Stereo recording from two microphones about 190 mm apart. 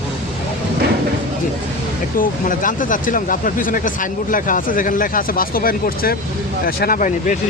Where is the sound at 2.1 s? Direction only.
45° left (ahead or behind).